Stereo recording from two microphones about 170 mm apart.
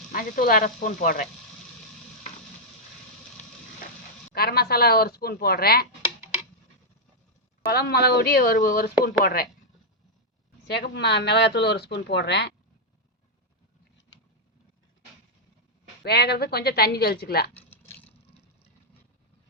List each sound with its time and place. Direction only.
0.1 s speech: 60° left (ahead or behind)
4.4 s speech: 65° left (ahead or behind)
7.6 s speech: 70° left (ahead or behind)
10.7 s speech: 75° left (ahead or behind)
16.0 s a woman's voice: 70° left (ahead or behind)
17.7 s a sound: 10° left (ahead or behind)